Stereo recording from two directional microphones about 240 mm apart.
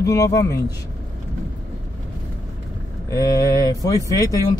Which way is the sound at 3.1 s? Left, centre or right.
Centre.